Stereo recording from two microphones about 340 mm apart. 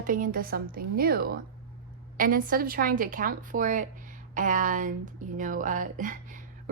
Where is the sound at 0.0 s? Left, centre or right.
Right.